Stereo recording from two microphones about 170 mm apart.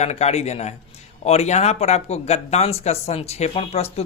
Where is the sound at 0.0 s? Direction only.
40° left (ahead or behind).